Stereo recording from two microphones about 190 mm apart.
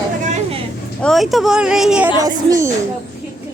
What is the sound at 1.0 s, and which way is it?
A woman's voice, centre (ahead or behind).